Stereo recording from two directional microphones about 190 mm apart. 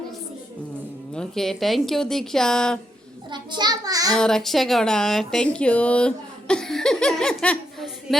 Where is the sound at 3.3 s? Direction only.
25° right (ahead or behind).